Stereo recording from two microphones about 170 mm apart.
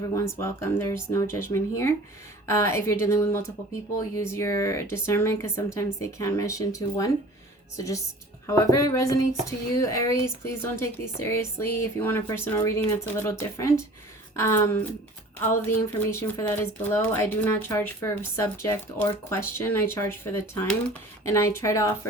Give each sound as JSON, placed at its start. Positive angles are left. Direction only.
{"t": 0.1, "sound": "speech", "side_deg": 15}
{"t": 8.4, "sound": "speech", "side_deg": 15}